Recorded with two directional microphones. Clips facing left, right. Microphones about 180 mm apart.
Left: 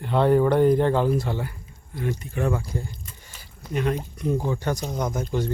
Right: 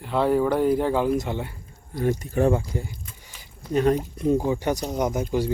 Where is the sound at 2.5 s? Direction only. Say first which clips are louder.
Right 3 dB; 20° right (ahead or behind).